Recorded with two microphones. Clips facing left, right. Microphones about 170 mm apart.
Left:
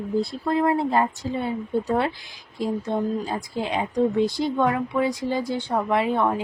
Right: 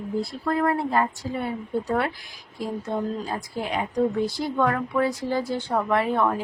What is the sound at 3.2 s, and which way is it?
A woman's voice, 25° left (ahead or behind).